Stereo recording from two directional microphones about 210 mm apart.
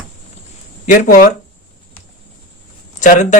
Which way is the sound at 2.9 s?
35° left (ahead or behind).